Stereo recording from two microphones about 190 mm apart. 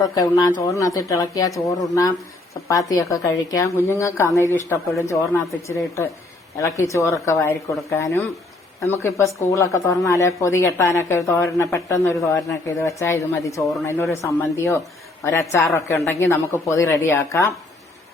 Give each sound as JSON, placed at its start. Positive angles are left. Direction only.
{"t": 0.0, "sound": "speech", "side_deg": 20}
{"t": 3.0, "sound": "speech", "side_deg": 15}